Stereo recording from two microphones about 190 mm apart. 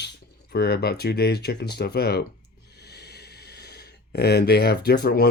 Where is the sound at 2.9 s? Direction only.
60° left (ahead or behind).